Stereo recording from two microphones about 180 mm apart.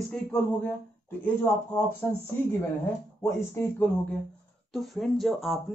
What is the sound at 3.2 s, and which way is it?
Speech, 15° left (ahead or behind).